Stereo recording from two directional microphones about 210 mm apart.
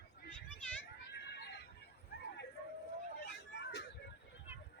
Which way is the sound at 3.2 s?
55° left (ahead or behind).